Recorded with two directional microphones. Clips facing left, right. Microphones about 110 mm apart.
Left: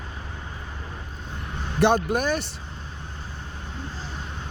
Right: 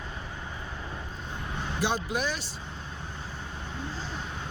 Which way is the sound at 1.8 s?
55° left (ahead or behind).